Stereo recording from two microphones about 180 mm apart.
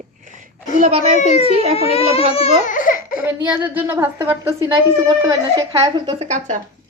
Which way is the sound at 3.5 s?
10° right (ahead or behind).